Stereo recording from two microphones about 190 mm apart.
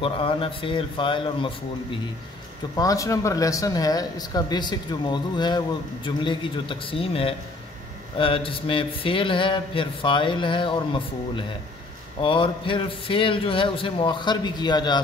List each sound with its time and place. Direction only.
0.0 s mantra: 30° left (ahead or behind)